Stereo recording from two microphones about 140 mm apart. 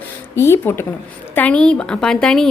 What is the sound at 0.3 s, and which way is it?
A woman's voice, 20° left (ahead or behind).